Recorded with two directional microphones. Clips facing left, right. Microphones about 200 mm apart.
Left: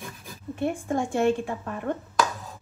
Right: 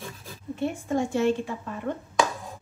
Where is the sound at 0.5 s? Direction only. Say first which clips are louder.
Even; 55° left (ahead or behind).